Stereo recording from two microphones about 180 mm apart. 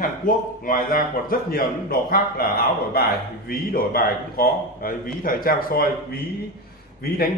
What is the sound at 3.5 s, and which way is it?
A man's voice, 55° left (ahead or behind).